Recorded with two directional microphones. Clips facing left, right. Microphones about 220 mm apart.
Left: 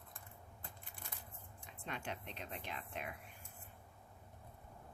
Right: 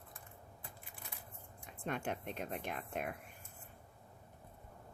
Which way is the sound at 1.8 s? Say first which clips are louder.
Right 6 dB; 50° right (ahead or behind).